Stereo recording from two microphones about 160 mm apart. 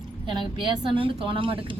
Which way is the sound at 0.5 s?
30° right (ahead or behind).